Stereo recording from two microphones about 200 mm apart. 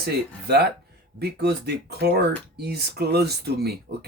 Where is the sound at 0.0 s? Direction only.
50° right (ahead or behind).